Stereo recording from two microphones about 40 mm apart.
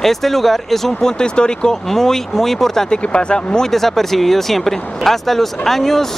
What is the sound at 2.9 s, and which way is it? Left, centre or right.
Speech, left.